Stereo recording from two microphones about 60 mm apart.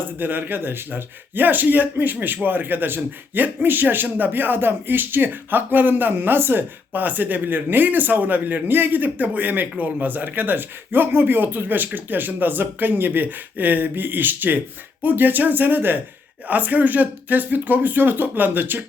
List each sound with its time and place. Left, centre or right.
0.2 s a man's voice: right